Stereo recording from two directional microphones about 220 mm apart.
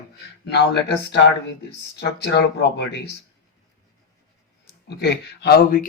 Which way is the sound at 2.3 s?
50° left (ahead or behind).